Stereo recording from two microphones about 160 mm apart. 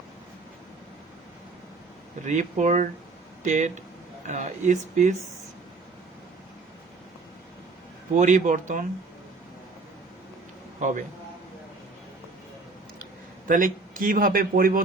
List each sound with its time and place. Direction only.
2.2 s speech: 50° right (ahead or behind)
8.1 s speech: 50° right (ahead or behind)
10.8 s a man's voice: 50° right (ahead or behind)
13.5 s a man's voice: 60° right (ahead or behind)